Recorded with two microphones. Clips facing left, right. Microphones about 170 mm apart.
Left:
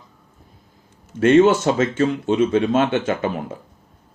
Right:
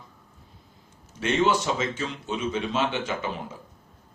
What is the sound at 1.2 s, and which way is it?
A man's voice, 50° left (ahead or behind).